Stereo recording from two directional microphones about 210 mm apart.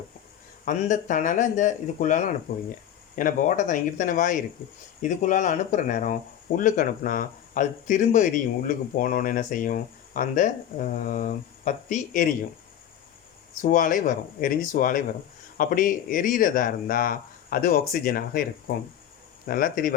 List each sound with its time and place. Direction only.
0.6 s speech: 40° left (ahead or behind)
13.6 s speech: 40° left (ahead or behind)